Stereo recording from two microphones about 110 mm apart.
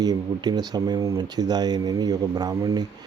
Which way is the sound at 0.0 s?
35° right (ahead or behind).